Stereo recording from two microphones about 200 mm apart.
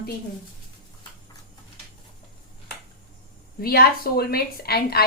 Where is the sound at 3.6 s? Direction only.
50° left (ahead or behind).